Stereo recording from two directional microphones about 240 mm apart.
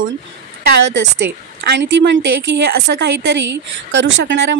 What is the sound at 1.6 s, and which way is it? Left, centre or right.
Speech, right.